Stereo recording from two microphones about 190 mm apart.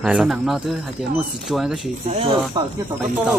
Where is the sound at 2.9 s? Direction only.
10° right (ahead or behind).